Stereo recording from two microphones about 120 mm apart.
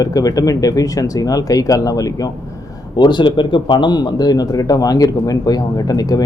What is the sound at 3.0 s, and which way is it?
Speech, 40° left (ahead or behind).